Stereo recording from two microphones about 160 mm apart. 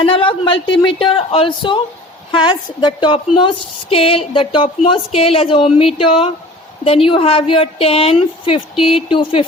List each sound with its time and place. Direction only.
0.0 s a woman's voice: 35° left (ahead or behind)